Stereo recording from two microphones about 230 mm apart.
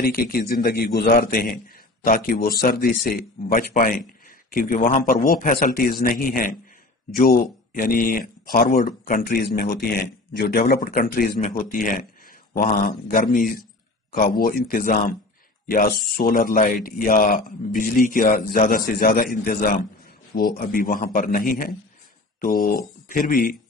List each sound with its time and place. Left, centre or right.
0.0 s speech: left